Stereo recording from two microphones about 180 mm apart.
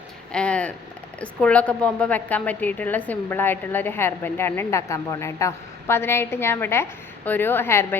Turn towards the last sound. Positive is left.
turn(degrees=10)  # may be behind; listen again after turning